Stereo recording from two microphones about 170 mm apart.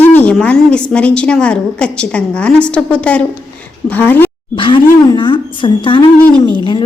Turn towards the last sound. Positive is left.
turn(degrees=30)  # may be behind; listen again after turning